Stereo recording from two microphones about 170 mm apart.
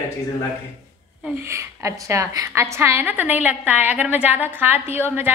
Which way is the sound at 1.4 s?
15° right (ahead or behind).